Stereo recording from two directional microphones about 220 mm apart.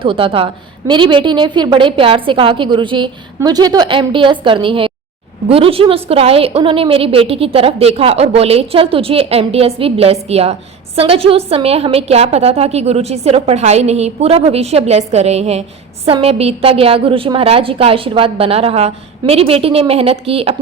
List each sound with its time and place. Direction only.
0.0 s a woman's voice: 25° right (ahead or behind)